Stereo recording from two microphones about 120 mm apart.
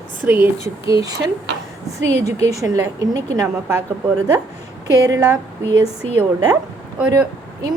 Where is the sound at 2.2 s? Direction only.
30° right (ahead or behind).